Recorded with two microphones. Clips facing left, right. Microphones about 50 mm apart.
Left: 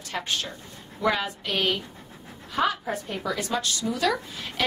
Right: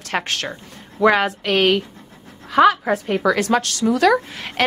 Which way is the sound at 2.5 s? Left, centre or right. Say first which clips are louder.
Right 11 dB; right.